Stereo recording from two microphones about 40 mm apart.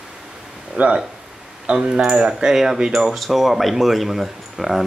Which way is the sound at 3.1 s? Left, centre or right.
Centre.